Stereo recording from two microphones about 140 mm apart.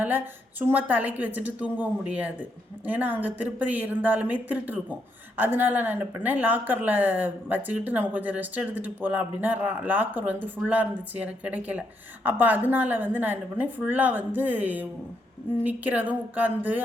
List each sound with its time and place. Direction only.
0.6 s speech: 15° right (ahead or behind)